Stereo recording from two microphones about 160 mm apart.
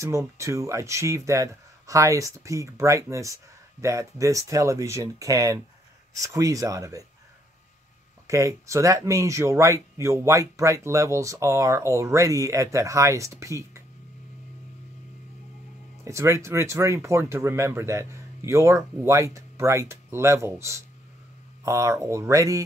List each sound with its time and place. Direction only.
0.4 s speech: 20° right (ahead or behind)
8.3 s speech: 20° right (ahead or behind)
16.0 s speech: 20° right (ahead or behind)